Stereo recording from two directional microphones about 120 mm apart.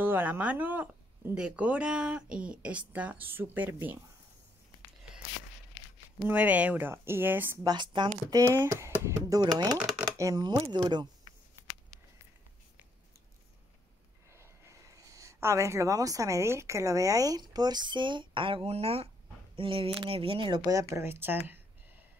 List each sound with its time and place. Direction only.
0.0 s speech: 15° right (ahead or behind)
6.1 s speech: 15° right (ahead or behind)
7.6 s speech: 40° right (ahead or behind)
8.3 s speech: 25° right (ahead or behind)
10.1 s speech: 30° right (ahead or behind)
11.9 s a sound: centre (ahead or behind)
14.3 s speech: 25° right (ahead or behind); by 20.7 s 40° right (ahead or behind)
20.9 s speech: 20° right (ahead or behind)